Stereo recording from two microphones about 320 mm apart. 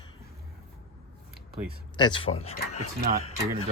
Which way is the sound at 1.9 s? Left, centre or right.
Centre.